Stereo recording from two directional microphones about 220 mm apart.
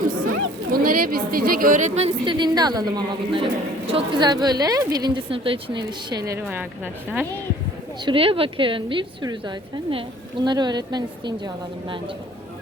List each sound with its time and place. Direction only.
0.7 s a woman's voice: 40° right (ahead or behind); by 7.3 s 5° right (ahead or behind)
8.0 s a woman's voice: 25° right (ahead or behind)